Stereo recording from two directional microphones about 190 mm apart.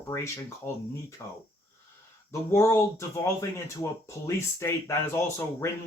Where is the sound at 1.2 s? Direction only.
15° left (ahead or behind).